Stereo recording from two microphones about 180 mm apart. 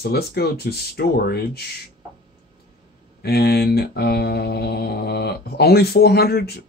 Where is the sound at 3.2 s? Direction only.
60° left (ahead or behind).